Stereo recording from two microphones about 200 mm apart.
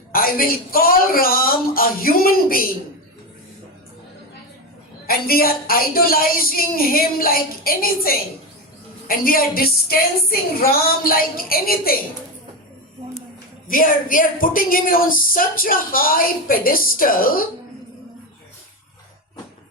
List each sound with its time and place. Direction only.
0.1 s a woman's voice: 45° left (ahead or behind)
5.0 s a woman's voice: 50° left (ahead or behind)
13.7 s a woman's voice: 45° left (ahead or behind)